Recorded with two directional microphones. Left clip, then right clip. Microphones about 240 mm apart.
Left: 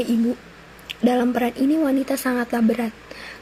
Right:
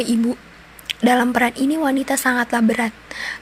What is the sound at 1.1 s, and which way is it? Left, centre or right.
A woman's voice, right.